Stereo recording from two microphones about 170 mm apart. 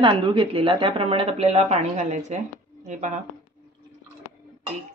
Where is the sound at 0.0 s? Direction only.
30° right (ahead or behind); by 3.2 s 45° right (ahead or behind).